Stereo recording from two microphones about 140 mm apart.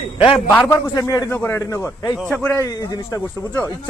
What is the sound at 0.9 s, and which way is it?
Speech, 25° left (ahead or behind).